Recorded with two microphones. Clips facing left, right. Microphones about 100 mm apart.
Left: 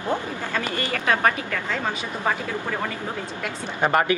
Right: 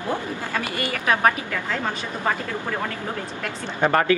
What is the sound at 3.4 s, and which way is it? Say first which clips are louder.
Speech: right 1 dB; 20° left (ahead or behind).